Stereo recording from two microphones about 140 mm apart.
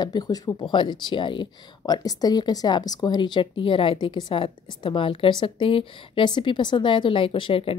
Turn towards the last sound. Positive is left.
turn(degrees=40)  # may be behind; listen again after turning